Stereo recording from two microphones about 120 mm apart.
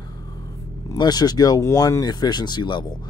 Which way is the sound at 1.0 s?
35° left (ahead or behind).